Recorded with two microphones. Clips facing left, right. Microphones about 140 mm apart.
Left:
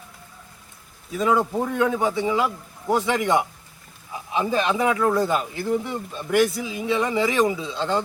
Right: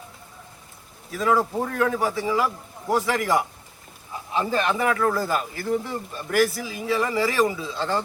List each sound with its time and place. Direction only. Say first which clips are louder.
1.1 s a man's voice: left 1 dB; 20° left (ahead or behind)
1.4 s a man's voice: left 1 dB; 5° left (ahead or behind)
1.7 s a man's voice: left 2 dB; 20° left (ahead or behind)
4.1 s a sound: left 1 dB; 15° left (ahead or behind)
4.8 s a man's voice: left 2 dB; 15° left (ahead or behind)